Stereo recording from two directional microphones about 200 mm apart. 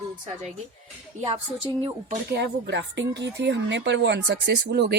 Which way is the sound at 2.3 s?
60° right (ahead or behind).